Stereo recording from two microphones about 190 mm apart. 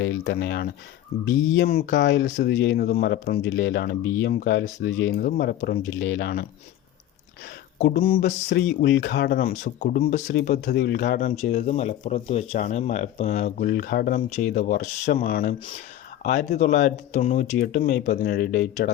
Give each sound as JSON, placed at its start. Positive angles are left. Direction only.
{"t": 0.0, "sound": "speech", "side_deg": 70}
{"t": 1.9, "sound": "speech", "side_deg": 70}
{"t": 5.2, "sound": "speech", "side_deg": 55}
{"t": 8.0, "sound": "a sound", "side_deg": 30}
{"t": 8.8, "sound": "speech", "side_deg": 60}
{"t": 9.5, "sound": "speech", "side_deg": 45}
{"t": 10.8, "sound": "speech", "side_deg": 55}
{"t": 11.3, "sound": "speech", "side_deg": 35}